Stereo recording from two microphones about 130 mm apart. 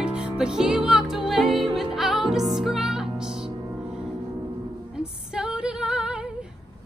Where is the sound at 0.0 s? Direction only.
5° right (ahead or behind).